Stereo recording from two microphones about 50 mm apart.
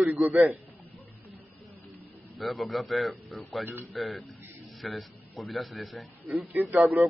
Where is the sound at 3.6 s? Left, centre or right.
Right.